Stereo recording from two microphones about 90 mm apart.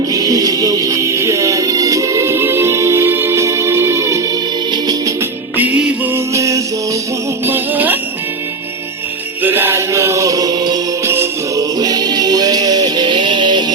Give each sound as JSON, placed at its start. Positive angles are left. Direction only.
{"t": 0.1, "sound": "music", "side_deg": -45}
{"t": 4.7, "sound": "music", "side_deg": -50}
{"t": 5.5, "sound": "music", "side_deg": -20}
{"t": 6.3, "sound": "music", "side_deg": -35}
{"t": 7.4, "sound": "music", "side_deg": -20}
{"t": 9.4, "sound": "mantra", "side_deg": -25}
{"t": 11.0, "sound": "music", "side_deg": -25}
{"t": 11.5, "sound": "music", "side_deg": -45}
{"t": 13.1, "sound": "music", "side_deg": -65}